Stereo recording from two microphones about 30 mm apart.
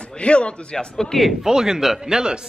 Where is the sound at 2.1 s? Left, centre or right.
Right.